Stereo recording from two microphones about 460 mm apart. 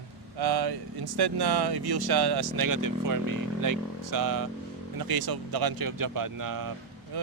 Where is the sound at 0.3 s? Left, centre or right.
Right.